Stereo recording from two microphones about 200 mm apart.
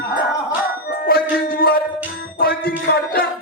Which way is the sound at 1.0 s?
50° left (ahead or behind).